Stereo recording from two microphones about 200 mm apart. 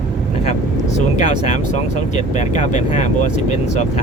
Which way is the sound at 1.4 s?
35° left (ahead or behind).